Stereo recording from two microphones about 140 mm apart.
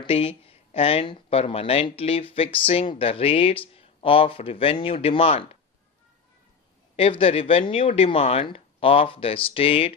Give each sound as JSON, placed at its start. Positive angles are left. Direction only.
{"t": 0.0, "sound": "speech", "side_deg": 40}
{"t": 6.9, "sound": "speech", "side_deg": 40}